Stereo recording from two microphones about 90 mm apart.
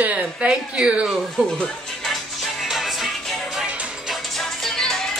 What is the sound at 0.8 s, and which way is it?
Speech, 10° right (ahead or behind).